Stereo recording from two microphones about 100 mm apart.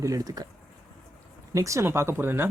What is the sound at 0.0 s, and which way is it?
Speech, 35° right (ahead or behind).